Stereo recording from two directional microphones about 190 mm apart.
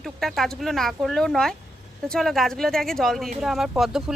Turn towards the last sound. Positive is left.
turn(degrees=0)  # may be behind; listen again after turning